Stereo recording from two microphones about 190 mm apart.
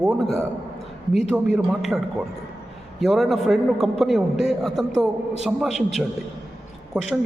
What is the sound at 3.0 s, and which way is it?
A man's voice, centre (ahead or behind).